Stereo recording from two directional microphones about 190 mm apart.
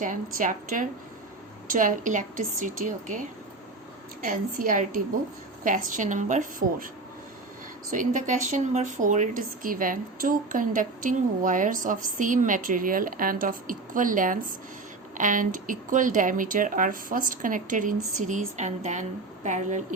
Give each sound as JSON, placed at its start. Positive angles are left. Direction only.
{"t": 0.0, "sound": "a woman's voice", "side_deg": -45}
{"t": 4.3, "sound": "a woman's voice", "side_deg": -45}
{"t": 7.9, "sound": "a woman's voice", "side_deg": -45}